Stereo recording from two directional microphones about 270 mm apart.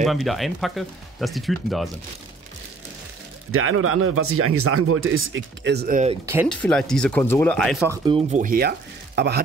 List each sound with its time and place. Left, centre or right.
0.0 s speech: centre
3.5 s speech: right
6.2 s speech: centre
7.9 s speech: centre; by 9.4 s right